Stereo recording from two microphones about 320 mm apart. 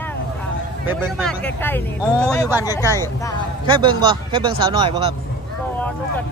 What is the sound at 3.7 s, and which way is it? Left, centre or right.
Speech, centre.